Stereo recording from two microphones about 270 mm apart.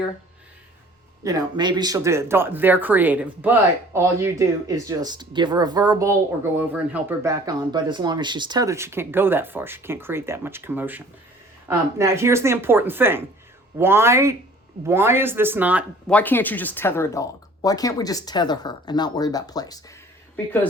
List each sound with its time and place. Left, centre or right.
1.2 s speech: centre
16.1 s speech: centre